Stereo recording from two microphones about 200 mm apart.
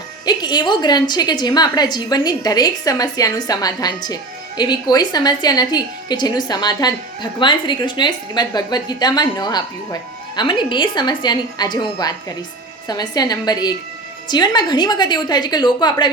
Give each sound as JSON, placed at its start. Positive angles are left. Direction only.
{"t": 0.3, "sound": "a woman's voice", "side_deg": 20}